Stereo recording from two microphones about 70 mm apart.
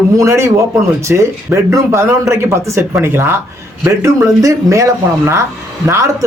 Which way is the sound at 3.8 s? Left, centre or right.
Right.